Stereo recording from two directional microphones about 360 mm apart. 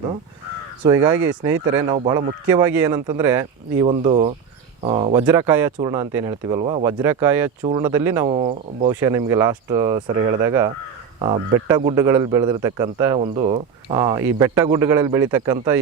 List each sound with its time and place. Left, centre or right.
0.9 s speech: centre
10.1 s speech: right
11.2 s speech: centre